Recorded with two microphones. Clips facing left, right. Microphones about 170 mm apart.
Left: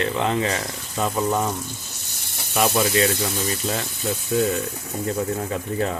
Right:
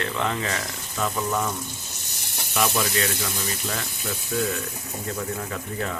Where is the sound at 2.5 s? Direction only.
20° left (ahead or behind).